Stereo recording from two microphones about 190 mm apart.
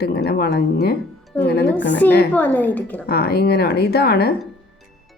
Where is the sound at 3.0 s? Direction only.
55° left (ahead or behind).